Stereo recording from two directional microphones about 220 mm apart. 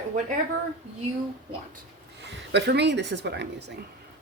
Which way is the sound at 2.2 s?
50° right (ahead or behind).